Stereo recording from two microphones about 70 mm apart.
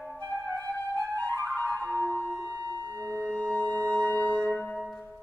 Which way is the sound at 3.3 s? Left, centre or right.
Centre.